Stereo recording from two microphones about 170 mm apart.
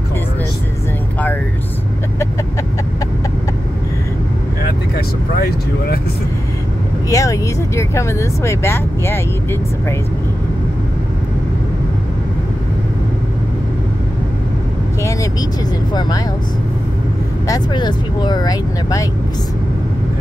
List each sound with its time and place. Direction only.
4.9 s vehicle: 65° left (ahead or behind)
7.1 s vehicle: 20° left (ahead or behind)
15.9 s speech: 25° left (ahead or behind)
17.5 s speech: 25° left (ahead or behind)